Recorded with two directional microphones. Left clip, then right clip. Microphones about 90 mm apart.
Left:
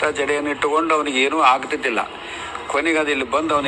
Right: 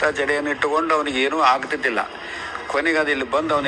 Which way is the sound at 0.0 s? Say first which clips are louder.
Even; 30° left (ahead or behind).